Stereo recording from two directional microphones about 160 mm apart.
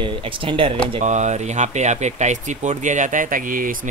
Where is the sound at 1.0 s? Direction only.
45° right (ahead or behind).